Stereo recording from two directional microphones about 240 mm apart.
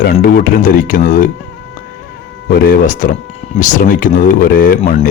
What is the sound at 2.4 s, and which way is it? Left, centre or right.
Speech, left.